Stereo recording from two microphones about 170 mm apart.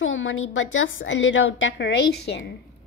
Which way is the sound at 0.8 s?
90° left.